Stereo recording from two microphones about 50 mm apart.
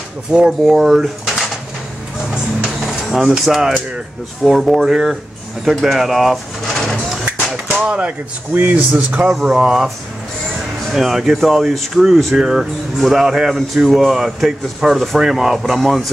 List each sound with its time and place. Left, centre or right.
0.3 s speech: centre
2.8 s speech: centre
4.8 s speech: centre
6.8 s a sound: centre
7.2 s a sound: right
8.5 s speech: right; by 9.8 s centre
10.9 s speech: centre
12.4 s speech: centre